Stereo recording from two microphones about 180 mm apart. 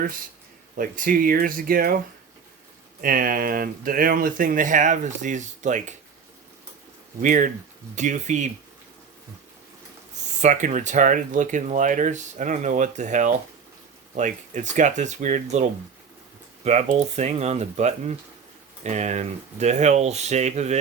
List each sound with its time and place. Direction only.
0.8 s speech: 50° right (ahead or behind)
3.0 s speech: 55° right (ahead or behind)
7.2 s speech: 45° right (ahead or behind)
10.4 s speech: 40° right (ahead or behind)